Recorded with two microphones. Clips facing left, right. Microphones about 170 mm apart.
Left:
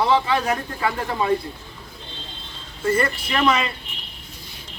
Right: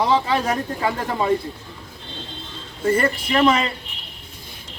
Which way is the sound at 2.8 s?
30° right (ahead or behind).